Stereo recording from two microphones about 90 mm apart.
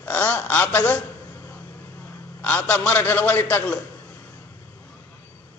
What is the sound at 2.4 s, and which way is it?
A man's voice, 20° left (ahead or behind).